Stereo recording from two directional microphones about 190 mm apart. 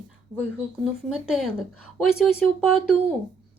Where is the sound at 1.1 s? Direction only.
5° right (ahead or behind).